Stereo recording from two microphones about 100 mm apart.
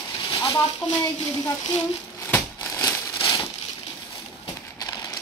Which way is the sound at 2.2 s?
25° left (ahead or behind).